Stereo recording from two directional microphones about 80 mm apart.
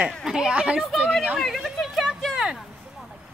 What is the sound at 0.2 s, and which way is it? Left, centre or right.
Speech, centre.